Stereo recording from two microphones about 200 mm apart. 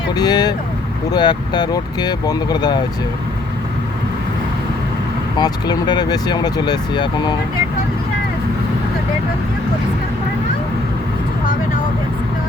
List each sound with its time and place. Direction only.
0.1 s speech: 20° left (ahead or behind)
5.4 s speech: 20° left (ahead or behind)